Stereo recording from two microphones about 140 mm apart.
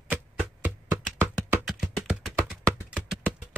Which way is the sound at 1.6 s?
5° right (ahead or behind).